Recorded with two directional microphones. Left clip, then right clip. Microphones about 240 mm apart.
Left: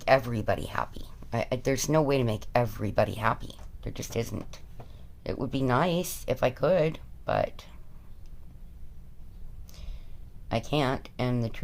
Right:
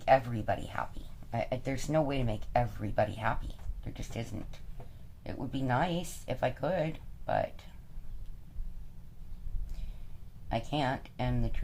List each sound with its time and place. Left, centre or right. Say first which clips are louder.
0.0 s speech: left 3 dB; left
10.5 s speech: left 4 dB; left